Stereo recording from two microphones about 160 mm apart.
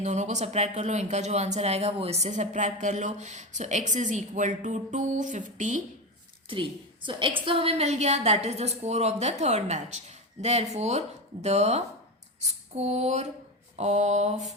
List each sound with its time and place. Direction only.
0.0 s speech: 45° right (ahead or behind)
6.5 s speech: 30° right (ahead or behind)